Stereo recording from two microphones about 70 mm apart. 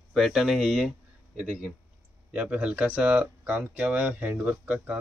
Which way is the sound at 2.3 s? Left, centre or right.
Right.